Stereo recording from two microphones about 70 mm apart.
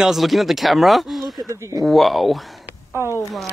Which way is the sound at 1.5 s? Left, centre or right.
Right.